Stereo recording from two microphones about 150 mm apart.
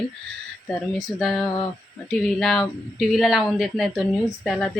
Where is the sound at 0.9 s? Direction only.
Centre (ahead or behind).